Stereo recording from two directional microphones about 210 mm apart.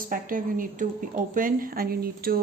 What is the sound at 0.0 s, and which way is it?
Speech, 40° right (ahead or behind).